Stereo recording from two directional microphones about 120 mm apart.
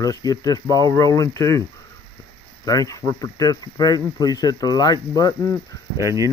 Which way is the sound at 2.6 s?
30° left (ahead or behind).